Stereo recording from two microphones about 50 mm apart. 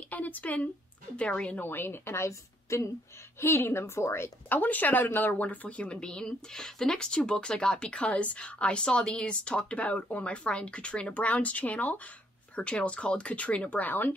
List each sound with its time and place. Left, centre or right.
0.1 s speech: left
1.6 s a woman's voice: left
3.3 s a woman's voice: left
4.5 s speech: left